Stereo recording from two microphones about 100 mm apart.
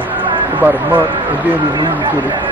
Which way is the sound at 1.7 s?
50° right (ahead or behind).